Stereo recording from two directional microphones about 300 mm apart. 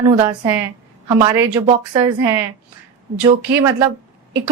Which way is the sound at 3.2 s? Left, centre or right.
Centre.